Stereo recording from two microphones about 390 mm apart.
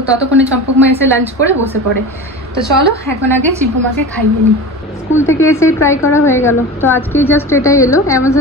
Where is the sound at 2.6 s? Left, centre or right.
Centre.